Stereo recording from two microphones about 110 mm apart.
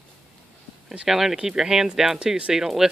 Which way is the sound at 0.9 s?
5° right (ahead or behind).